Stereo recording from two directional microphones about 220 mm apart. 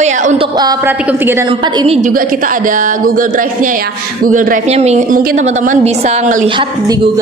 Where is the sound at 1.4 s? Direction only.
20° right (ahead or behind).